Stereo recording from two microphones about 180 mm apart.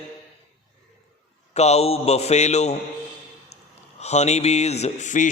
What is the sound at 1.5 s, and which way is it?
A man's voice, 35° left (ahead or behind).